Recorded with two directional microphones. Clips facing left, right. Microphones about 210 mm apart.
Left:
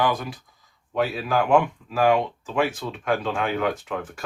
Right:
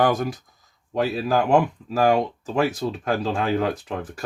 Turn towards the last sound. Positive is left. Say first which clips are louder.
# even
turn(degrees=-35)  # may be behind; listen again after turning